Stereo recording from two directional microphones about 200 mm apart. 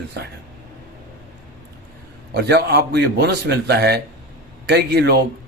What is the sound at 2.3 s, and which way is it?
A man's voice, 55° right (ahead or behind).